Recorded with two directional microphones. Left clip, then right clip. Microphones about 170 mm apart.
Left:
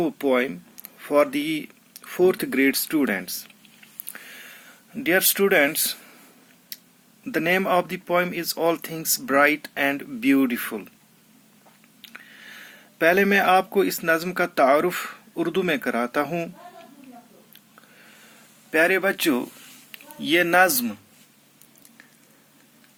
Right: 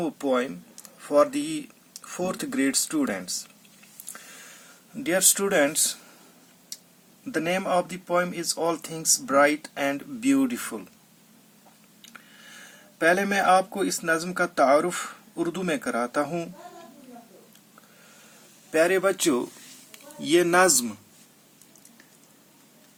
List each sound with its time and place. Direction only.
0.0 s speech: 15° left (ahead or behind)
5.0 s speech: 15° left (ahead or behind)
6.7 s a sound: 20° left (ahead or behind)
7.3 s speech: 20° left (ahead or behind)
12.0 s speech: 20° left (ahead or behind)
18.7 s speech: 20° left (ahead or behind)